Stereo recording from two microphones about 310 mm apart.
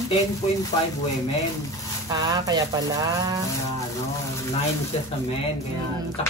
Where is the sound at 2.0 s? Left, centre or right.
Centre.